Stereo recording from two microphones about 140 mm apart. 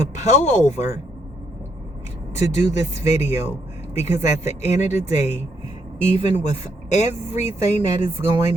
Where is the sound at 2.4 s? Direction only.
55° left (ahead or behind).